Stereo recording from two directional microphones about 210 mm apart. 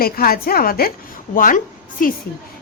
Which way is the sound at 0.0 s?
45° left (ahead or behind).